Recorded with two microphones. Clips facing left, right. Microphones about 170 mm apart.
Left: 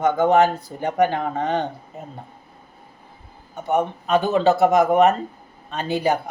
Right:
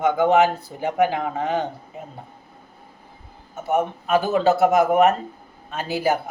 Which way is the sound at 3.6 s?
5° right (ahead or behind).